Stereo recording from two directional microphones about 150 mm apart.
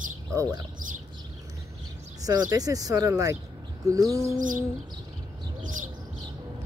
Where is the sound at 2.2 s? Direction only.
25° right (ahead or behind).